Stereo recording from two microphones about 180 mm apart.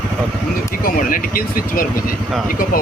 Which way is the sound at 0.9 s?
50° left (ahead or behind).